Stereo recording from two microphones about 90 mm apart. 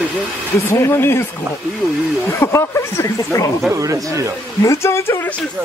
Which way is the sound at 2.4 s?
30° left (ahead or behind).